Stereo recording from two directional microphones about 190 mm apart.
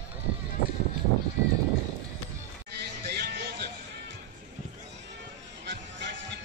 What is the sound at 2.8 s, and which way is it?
Music, 60° right (ahead or behind).